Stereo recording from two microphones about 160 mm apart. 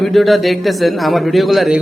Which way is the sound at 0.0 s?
Centre (ahead or behind).